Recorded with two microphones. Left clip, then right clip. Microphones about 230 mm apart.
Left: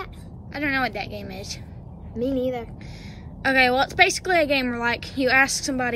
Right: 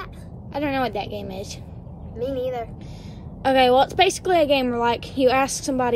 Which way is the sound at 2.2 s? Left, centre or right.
Left.